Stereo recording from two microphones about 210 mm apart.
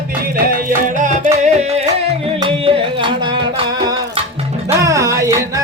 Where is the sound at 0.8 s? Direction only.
40° right (ahead or behind).